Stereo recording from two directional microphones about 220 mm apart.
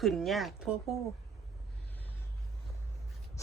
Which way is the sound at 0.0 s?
Centre (ahead or behind).